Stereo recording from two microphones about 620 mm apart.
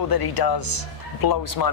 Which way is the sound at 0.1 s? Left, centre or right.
Left.